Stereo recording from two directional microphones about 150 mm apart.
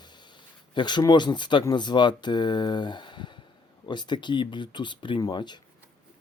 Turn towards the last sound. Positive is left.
turn(degrees=30)  # may be behind; listen again after turning